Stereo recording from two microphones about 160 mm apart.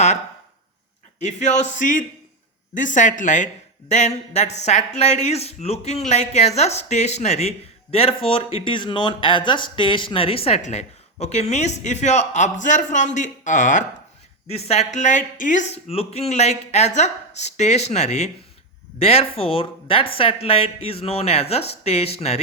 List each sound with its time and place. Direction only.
1.2 s speech: 45° left (ahead or behind)
14.4 s speech: 40° left (ahead or behind)